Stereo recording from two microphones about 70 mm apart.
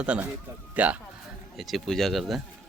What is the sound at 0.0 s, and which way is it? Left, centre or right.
Speech, centre.